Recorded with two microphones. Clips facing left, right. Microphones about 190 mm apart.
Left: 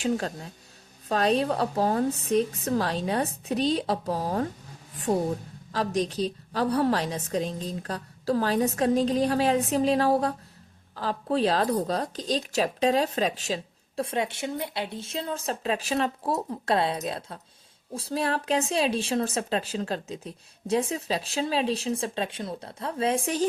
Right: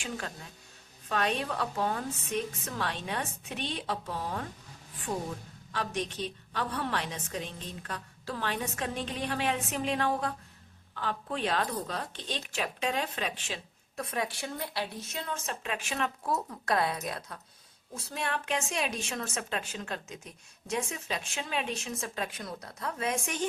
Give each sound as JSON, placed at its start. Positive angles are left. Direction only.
{"t": 0.0, "sound": "speech", "side_deg": 35}